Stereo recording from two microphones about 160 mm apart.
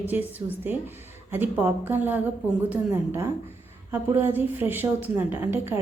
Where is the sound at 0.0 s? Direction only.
10° right (ahead or behind).